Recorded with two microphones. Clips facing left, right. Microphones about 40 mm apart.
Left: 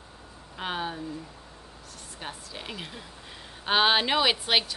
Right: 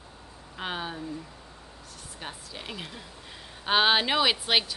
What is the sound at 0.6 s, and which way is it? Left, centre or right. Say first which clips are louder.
Speech: left 2 dB; centre.